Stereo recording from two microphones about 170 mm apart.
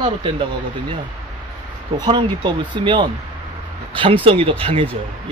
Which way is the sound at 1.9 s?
25° right (ahead or behind).